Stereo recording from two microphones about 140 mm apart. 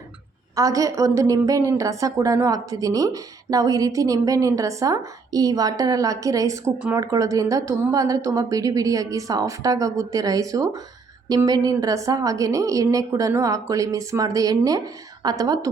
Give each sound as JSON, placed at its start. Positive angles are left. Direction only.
{"t": 0.5, "sound": "a woman's voice", "side_deg": -25}